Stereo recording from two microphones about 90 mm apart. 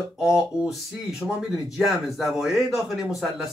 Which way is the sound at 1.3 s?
5° right (ahead or behind).